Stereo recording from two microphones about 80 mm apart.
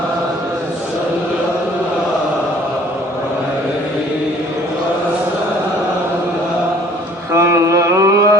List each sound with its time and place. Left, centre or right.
7.3 s mantra: right